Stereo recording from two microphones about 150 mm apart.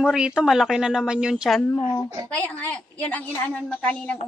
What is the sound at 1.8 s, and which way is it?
Speech, 30° left (ahead or behind).